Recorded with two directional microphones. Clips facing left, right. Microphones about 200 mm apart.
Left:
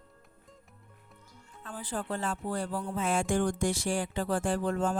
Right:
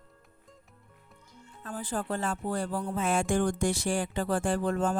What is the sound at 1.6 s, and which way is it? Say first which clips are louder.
Speech: right 3 dB; 45° right (ahead or behind).